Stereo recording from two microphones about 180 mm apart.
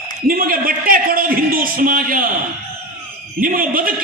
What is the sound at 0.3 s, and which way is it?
Speech, 50° right (ahead or behind).